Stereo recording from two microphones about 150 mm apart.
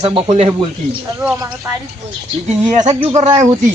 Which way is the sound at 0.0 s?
35° right (ahead or behind).